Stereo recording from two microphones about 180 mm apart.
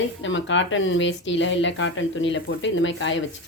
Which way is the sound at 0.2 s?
90° left.